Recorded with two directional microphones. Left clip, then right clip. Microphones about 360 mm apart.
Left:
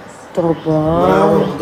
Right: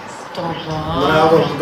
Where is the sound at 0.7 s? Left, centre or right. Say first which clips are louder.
Left 9 dB; left.